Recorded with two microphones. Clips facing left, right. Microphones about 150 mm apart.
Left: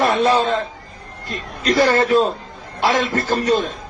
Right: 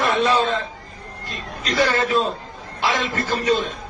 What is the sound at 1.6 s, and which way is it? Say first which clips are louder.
A man's voice: left 5 dB; 45° left (ahead or behind).